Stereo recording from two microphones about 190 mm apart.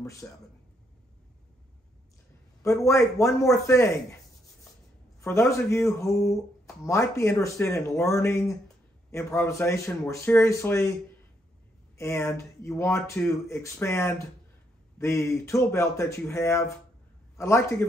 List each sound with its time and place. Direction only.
0.2 s speech: 10° left (ahead or behind)
2.8 s speech: 15° left (ahead or behind)
5.2 s speech: 15° left (ahead or behind)
12.0 s speech: 15° left (ahead or behind)